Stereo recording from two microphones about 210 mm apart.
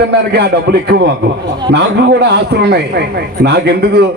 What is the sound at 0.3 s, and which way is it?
A man's voice, 50° right (ahead or behind).